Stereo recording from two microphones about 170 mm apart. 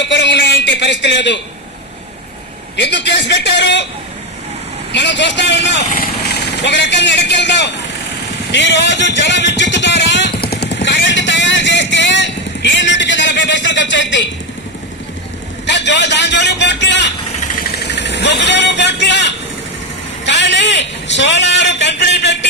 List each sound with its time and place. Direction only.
0.0 s a sound: 90° left
2.7 s a man's voice: 90° left
4.9 s speech: 90° left
8.5 s music: 90° left
15.6 s a man's voice: 90° left
17.5 s vehicle: 75° left (ahead or behind)
20.2 s a sound: 90° left